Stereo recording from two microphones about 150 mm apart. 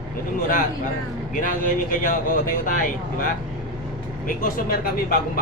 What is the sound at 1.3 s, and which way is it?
Speech, 65° left (ahead or behind).